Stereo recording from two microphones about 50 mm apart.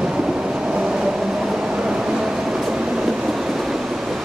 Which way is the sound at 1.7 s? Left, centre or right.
Centre.